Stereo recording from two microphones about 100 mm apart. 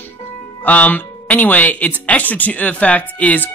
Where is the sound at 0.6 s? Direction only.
15° left (ahead or behind).